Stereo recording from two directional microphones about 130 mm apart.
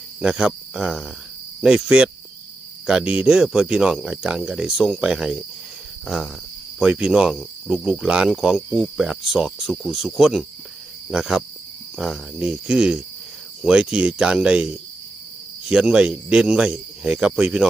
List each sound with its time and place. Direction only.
0.2 s speech: 5° right (ahead or behind)